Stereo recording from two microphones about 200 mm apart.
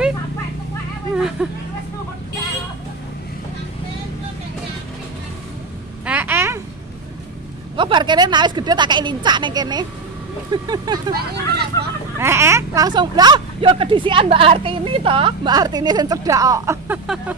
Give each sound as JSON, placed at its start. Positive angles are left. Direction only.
{"t": 1.1, "sound": "hubbub", "side_deg": 0}
{"t": 6.0, "sound": "a sound", "side_deg": -10}
{"t": 7.7, "sound": "a woman's voice", "side_deg": -25}
{"t": 12.2, "sound": "speech", "side_deg": -10}